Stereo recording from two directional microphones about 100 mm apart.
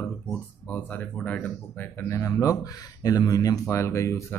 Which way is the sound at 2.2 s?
35° left (ahead or behind).